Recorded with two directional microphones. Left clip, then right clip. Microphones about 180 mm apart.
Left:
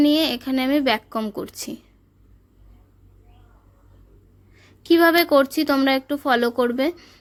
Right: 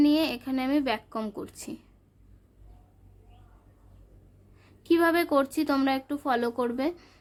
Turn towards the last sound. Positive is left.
turn(degrees=10)  # may be behind; listen again after turning